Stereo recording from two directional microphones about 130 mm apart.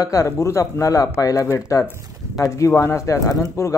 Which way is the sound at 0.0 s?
25° left (ahead or behind).